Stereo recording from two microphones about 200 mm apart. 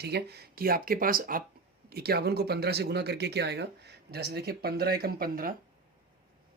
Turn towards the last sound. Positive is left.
turn(degrees=-45)  # may be behind; listen again after turning